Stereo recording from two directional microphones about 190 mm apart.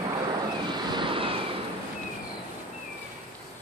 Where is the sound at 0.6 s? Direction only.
25° right (ahead or behind).